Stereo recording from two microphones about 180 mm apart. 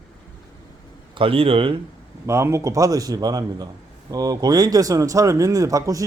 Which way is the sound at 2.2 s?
15° right (ahead or behind).